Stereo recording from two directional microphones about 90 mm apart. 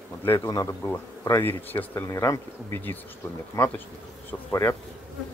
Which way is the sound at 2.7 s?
20° left (ahead or behind).